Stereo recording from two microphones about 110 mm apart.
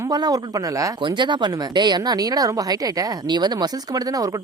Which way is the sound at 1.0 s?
45° right (ahead or behind).